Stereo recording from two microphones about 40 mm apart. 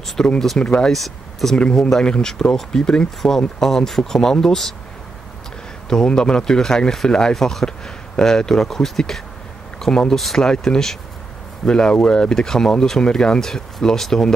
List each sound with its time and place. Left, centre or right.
0.2 s speech: centre
0.8 s speech: centre
3.2 s speech: centre
5.9 s speech: centre
10.1 s speech: centre
10.4 s speech: centre
11.6 s speech: left